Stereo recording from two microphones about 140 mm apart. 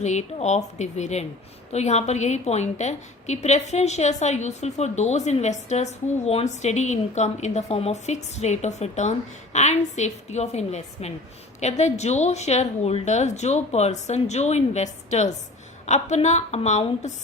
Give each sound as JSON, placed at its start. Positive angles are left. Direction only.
{"t": 0.0, "sound": "a woman's voice", "side_deg": 55}